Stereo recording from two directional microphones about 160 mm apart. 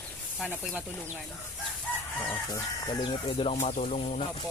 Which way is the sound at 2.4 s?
25° left (ahead or behind).